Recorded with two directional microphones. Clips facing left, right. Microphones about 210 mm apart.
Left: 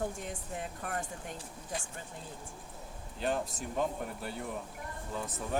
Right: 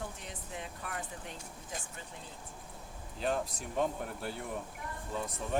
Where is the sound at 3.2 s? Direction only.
Centre (ahead or behind).